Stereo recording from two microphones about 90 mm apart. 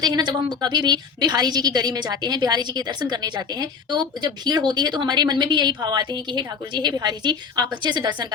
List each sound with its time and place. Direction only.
0.0 s a woman's voice: 55° right (ahead or behind)